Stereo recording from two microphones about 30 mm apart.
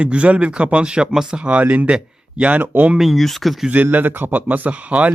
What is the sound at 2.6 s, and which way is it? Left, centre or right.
Speech, right.